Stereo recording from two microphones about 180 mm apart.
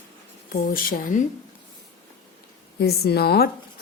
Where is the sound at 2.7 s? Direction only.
60° left (ahead or behind).